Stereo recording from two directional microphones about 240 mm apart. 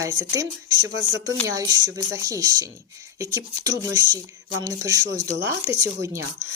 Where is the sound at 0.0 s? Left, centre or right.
Centre.